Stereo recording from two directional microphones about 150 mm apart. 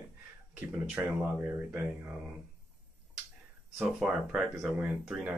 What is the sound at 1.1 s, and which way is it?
Speech, 10° right (ahead or behind).